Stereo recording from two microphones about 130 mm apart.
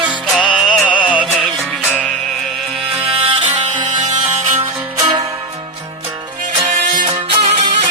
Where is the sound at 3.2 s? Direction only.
65° right (ahead or behind).